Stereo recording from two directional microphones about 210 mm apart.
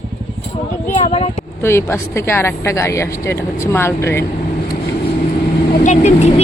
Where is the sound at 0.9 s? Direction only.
30° left (ahead or behind).